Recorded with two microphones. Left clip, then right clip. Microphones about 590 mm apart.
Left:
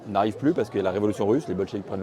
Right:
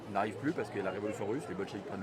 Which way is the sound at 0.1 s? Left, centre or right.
Left.